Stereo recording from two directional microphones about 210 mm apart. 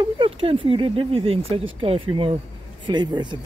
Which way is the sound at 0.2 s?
25° right (ahead or behind).